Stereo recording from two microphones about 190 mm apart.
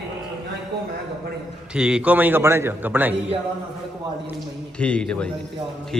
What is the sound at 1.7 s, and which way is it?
A man's voice, 5° right (ahead or behind).